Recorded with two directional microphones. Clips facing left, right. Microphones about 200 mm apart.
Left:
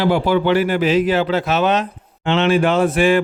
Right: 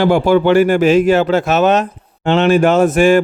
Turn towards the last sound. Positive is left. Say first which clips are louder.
# right 4 dB
turn(degrees=-45)  # may be behind; listen again after turning